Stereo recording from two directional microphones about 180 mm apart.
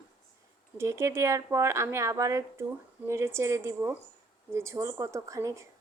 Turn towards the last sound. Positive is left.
turn(degrees=-15)  # may be behind; listen again after turning